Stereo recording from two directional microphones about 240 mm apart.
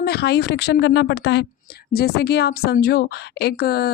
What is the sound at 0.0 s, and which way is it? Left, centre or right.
A woman's voice, left.